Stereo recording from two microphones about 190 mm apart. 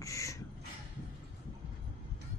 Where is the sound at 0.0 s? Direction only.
15° left (ahead or behind).